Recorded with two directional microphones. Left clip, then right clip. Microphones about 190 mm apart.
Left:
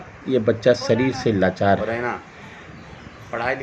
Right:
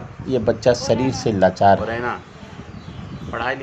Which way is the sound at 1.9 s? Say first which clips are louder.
Right 1 dB; 15° left (ahead or behind).